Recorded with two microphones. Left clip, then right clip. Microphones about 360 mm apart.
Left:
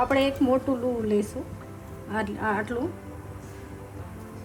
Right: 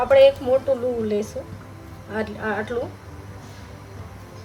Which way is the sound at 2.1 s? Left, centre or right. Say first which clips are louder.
Right 1 dB; centre.